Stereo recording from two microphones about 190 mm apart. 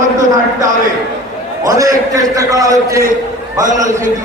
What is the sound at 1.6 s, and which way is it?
Speech, 20° right (ahead or behind).